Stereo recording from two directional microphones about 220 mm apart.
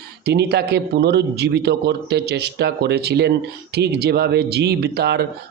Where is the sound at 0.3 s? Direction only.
45° right (ahead or behind).